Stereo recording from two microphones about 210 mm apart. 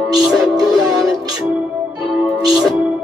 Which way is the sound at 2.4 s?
Centre (ahead or behind).